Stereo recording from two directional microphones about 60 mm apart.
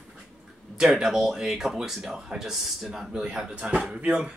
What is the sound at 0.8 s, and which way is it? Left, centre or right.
Speech, centre.